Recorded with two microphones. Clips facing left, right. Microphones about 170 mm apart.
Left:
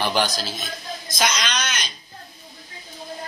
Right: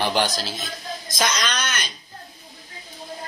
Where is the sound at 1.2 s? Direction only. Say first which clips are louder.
Even; 50° right (ahead or behind).